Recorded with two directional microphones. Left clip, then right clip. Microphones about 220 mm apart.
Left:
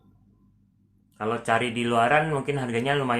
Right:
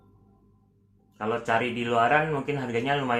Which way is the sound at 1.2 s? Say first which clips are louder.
Left 1 dB; 45° left (ahead or behind).